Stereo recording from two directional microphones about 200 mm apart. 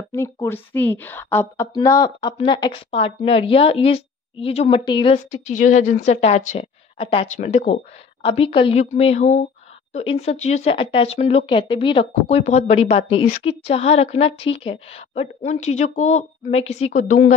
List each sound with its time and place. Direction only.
0.1 s a woman's voice: 15° left (ahead or behind); by 17.3 s 40° left (ahead or behind)